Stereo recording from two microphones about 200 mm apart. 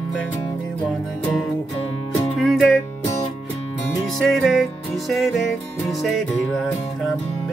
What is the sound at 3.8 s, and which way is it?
Music, centre (ahead or behind).